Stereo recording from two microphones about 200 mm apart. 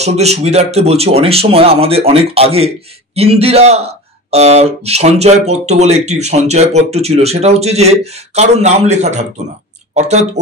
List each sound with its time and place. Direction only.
0.0 s a man's voice: 30° right (ahead or behind)